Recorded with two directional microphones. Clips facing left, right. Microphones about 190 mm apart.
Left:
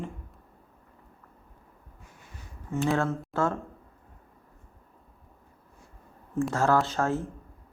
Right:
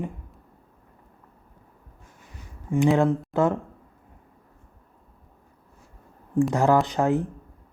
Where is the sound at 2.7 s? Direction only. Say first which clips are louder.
Right 7 dB; 15° right (ahead or behind).